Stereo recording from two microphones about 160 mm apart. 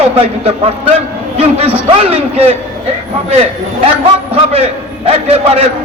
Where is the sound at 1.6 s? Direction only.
40° right (ahead or behind).